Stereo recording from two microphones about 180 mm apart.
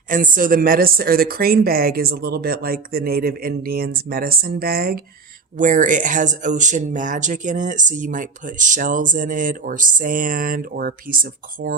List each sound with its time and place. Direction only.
0.1 s speech: 50° right (ahead or behind)
5.5 s speech: 45° right (ahead or behind)